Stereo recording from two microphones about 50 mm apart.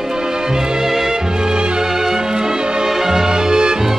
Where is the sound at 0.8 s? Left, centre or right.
Centre.